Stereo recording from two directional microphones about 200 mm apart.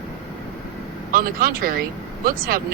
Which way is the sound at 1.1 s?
45° right (ahead or behind).